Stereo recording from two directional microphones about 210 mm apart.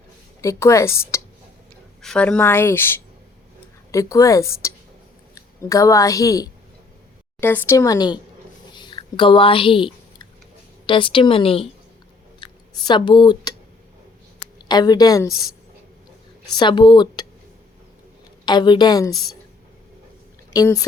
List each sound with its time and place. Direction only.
0.4 s a woman's voice: 15° left (ahead or behind)
8.7 s a sound: 20° left (ahead or behind)
10.8 s a woman's voice: 25° left (ahead or behind)
14.7 s a woman's voice: 20° left (ahead or behind)
16.6 s a woman's voice: 20° left (ahead or behind)
18.4 s a woman's voice: 20° left (ahead or behind)
20.5 s speech: 15° left (ahead or behind)